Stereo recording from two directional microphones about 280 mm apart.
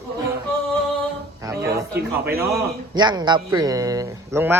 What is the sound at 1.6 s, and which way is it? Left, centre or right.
Speech, right.